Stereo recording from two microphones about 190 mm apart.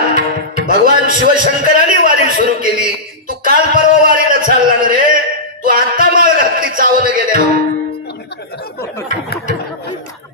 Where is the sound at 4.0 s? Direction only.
45° right (ahead or behind).